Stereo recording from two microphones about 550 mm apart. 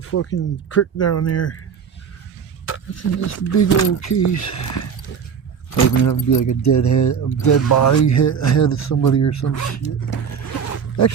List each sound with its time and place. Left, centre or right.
0.0 s speech: left
2.6 s speech: left
10.1 s a sound: left